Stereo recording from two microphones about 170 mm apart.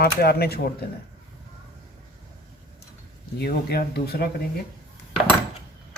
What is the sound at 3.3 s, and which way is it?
Speech, 70° left (ahead or behind).